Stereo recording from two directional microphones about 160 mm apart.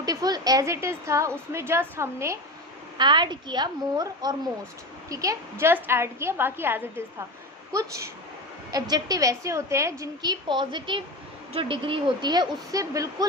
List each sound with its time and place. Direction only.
0.0 s a woman's voice: 25° right (ahead or behind)
3.0 s a woman's voice: 30° right (ahead or behind)